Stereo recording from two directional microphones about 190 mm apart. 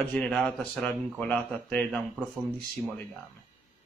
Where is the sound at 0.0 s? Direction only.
5° left (ahead or behind).